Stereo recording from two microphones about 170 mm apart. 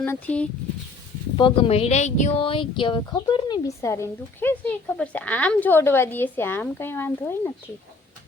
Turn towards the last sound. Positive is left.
turn(degrees=10)  # may be behind; listen again after turning